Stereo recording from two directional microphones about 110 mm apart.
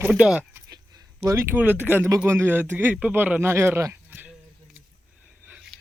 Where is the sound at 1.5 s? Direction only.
15° right (ahead or behind).